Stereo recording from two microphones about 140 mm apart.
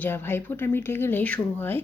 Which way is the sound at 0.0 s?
15° left (ahead or behind).